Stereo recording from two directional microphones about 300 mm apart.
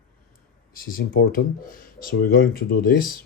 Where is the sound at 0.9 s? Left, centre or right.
Left.